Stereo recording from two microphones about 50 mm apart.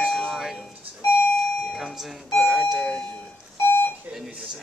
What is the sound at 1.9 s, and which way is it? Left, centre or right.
Speech, centre.